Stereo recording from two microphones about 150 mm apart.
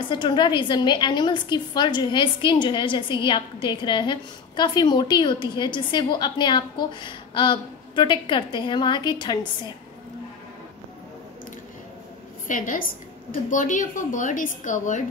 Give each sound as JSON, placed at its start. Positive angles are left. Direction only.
{"t": 0.0, "sound": "a woman's voice", "side_deg": 30}
{"t": 12.4, "sound": "a woman's voice", "side_deg": 65}